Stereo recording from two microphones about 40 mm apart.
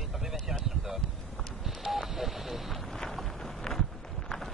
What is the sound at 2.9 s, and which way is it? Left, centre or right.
Boat, centre.